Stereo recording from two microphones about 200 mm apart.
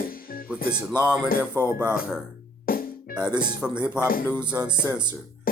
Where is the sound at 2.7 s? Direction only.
45° left (ahead or behind).